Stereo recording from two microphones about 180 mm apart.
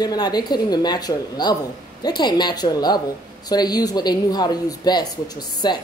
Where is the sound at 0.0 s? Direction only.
20° left (ahead or behind).